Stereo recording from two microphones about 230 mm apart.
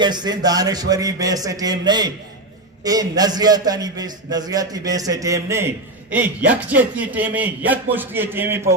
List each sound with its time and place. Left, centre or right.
0.0 s a man's voice: centre